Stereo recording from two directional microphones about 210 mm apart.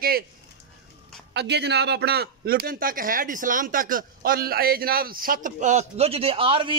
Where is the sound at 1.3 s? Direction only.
55° right (ahead or behind).